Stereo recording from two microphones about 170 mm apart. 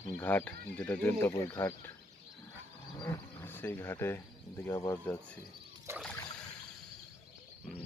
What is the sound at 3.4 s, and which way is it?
Speech, 15° left (ahead or behind).